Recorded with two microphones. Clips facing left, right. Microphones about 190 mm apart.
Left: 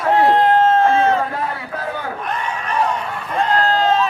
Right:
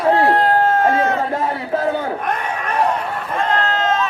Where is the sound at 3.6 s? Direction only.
35° left (ahead or behind).